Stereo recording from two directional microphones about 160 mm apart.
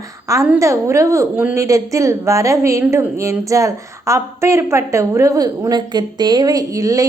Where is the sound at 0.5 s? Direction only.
20° right (ahead or behind).